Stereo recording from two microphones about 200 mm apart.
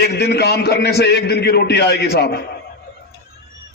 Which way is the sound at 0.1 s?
55° left (ahead or behind).